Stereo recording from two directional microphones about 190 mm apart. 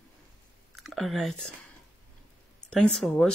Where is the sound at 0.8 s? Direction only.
Centre (ahead or behind).